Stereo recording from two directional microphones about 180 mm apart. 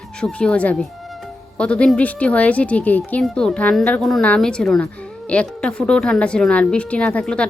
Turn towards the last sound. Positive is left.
turn(degrees=5)  # may be behind; listen again after turning